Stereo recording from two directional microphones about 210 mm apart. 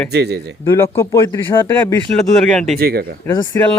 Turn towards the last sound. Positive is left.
turn(degrees=20)  # may be behind; listen again after turning